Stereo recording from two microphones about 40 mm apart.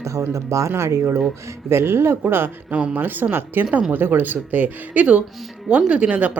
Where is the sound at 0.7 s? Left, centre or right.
Right.